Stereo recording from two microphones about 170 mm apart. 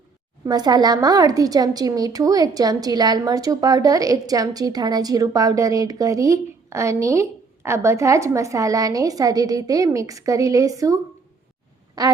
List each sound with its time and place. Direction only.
0.4 s a woman's voice: 25° right (ahead or behind)
12.0 s a woman's voice: 20° right (ahead or behind)